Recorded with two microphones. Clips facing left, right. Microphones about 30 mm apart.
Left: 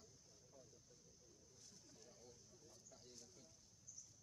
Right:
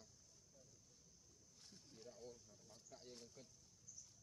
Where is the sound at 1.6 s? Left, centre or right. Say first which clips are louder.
Right 4 dB; right.